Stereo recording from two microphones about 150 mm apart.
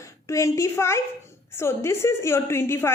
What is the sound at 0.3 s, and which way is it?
A woman's voice, 20° left (ahead or behind).